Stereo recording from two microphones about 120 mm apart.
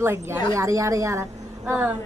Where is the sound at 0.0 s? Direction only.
20° right (ahead or behind).